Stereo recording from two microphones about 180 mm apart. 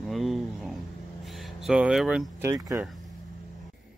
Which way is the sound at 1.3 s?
Centre (ahead or behind).